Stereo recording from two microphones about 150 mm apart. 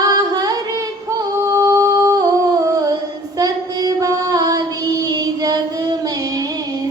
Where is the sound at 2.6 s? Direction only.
25° right (ahead or behind).